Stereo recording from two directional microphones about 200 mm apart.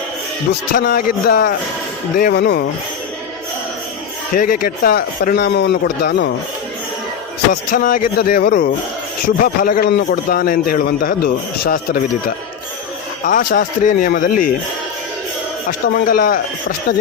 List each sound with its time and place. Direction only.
0.7 s speech: 50° left (ahead or behind)
4.4 s speech: 45° left (ahead or behind)
7.5 s speech: 45° left (ahead or behind)
13.2 s speech: 40° left (ahead or behind)
15.9 s speech: 50° left (ahead or behind)